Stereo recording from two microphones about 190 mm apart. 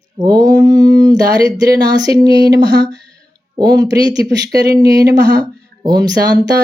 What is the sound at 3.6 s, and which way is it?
Speech, 20° right (ahead or behind).